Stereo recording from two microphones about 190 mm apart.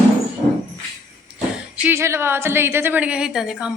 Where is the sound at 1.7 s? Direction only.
10° right (ahead or behind).